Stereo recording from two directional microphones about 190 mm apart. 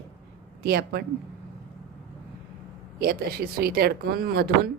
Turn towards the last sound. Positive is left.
turn(degrees=-55)  # may be behind; listen again after turning